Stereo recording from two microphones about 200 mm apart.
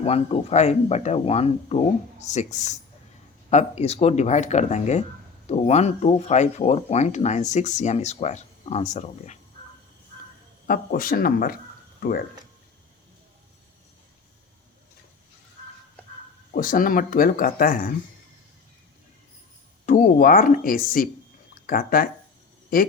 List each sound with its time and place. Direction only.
0.0 s speech: 30° left (ahead or behind)
10.7 s speech: 45° left (ahead or behind)
16.5 s speech: 45° left (ahead or behind)
19.8 s speech: 40° left (ahead or behind)